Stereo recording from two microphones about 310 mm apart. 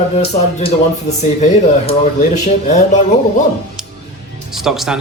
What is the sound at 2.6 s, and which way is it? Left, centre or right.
Speech, left.